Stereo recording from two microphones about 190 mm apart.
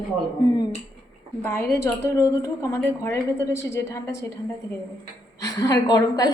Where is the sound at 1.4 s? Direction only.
15° left (ahead or behind).